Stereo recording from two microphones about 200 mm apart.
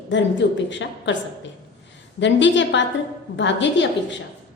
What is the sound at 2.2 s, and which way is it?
A woman's voice, 65° left (ahead or behind).